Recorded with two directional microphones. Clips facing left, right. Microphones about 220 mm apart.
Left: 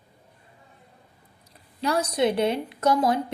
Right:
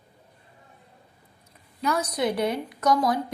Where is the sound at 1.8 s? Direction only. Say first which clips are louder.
Left 2 dB; 30° left (ahead or behind).